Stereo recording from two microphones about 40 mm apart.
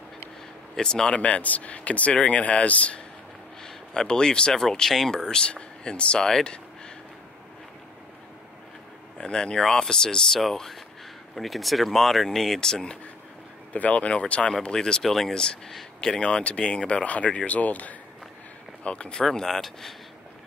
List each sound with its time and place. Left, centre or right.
0.7 s speech: centre
1.2 s speech: left
3.6 s speech: centre
4.8 s speech: centre
9.2 s speech: centre
10.4 s speech: centre
13.7 s speech: left; by 15.0 s centre
15.0 s speech: centre
16.0 s speech: left
18.9 s speech: left
19.2 s speech: centre